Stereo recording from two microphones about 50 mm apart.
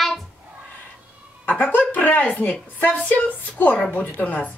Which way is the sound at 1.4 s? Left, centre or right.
Left.